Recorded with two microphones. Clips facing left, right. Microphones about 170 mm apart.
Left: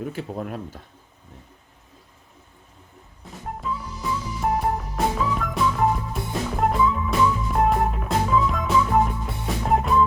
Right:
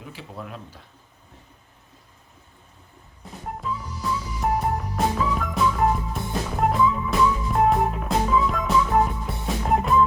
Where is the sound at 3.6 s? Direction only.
Centre (ahead or behind).